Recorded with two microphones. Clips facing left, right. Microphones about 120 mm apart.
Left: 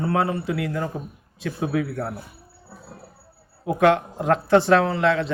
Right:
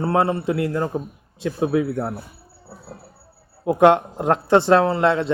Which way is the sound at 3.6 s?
25° right (ahead or behind).